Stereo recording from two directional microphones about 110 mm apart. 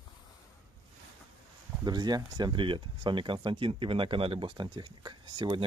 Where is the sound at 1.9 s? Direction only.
40° right (ahead or behind).